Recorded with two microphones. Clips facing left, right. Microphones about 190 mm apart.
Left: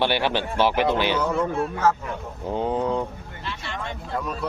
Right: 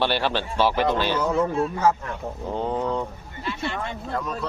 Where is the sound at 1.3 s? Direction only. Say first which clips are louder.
Right 2 dB; 10° right (ahead or behind).